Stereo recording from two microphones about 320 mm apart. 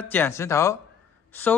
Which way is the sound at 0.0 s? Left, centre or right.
Centre.